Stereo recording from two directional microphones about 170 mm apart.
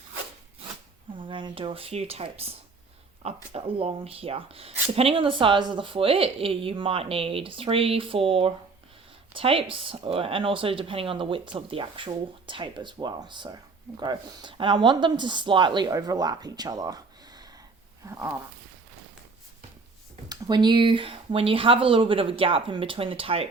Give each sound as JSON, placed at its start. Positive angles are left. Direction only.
{"t": 1.1, "sound": "speech", "side_deg": -30}
{"t": 18.0, "sound": "a sound", "side_deg": -15}
{"t": 20.2, "sound": "speech", "side_deg": -25}